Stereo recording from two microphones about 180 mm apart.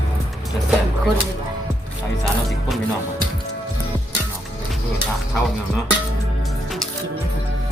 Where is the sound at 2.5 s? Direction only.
Centre (ahead or behind).